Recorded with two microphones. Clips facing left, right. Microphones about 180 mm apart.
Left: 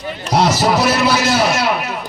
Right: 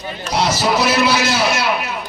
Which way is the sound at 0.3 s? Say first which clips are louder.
Left 3 dB; 50° left (ahead or behind).